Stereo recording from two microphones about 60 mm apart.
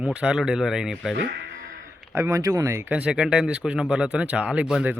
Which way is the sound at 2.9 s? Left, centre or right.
Centre.